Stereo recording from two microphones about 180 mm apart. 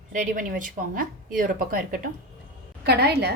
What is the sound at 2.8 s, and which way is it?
Speech, 65° right (ahead or behind).